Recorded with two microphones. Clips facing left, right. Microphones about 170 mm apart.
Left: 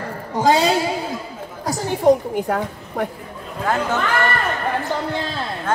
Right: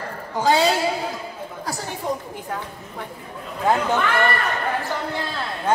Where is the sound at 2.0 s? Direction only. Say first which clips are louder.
Left 13 dB; 70° left (ahead or behind).